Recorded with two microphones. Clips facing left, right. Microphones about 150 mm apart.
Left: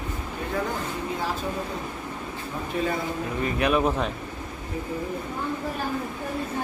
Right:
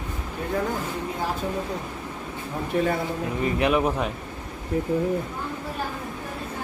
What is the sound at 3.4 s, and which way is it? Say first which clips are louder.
Speech: right 1 dB; 20° right (ahead or behind).